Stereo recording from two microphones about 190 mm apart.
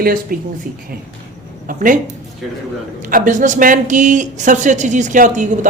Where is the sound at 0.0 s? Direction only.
50° right (ahead or behind).